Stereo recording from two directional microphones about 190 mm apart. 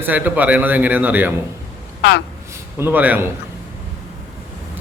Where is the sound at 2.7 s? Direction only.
10° right (ahead or behind).